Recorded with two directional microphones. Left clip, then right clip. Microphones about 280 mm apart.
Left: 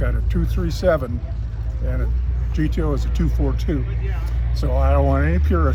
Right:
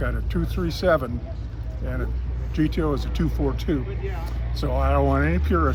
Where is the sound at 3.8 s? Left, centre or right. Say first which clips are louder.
Right 1 dB; right.